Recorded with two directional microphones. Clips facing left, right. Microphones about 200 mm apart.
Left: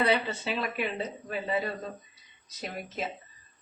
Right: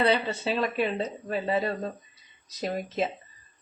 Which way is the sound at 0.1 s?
30° right (ahead or behind).